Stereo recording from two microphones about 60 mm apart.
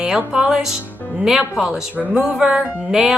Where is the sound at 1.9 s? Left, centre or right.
Right.